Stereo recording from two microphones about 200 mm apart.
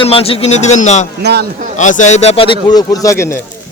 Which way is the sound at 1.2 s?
55° right (ahead or behind).